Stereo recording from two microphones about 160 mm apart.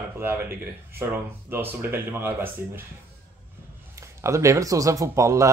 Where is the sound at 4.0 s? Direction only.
20° right (ahead or behind).